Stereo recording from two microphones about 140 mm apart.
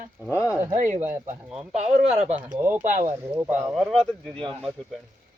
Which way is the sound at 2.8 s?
60° right (ahead or behind).